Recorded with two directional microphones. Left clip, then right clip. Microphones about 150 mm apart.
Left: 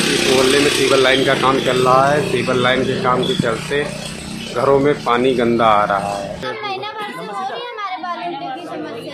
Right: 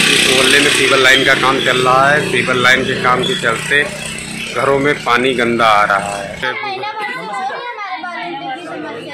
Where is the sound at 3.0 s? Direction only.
5° left (ahead or behind).